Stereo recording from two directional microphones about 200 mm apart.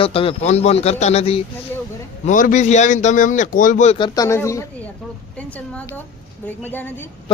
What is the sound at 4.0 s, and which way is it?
Speech, 15° left (ahead or behind).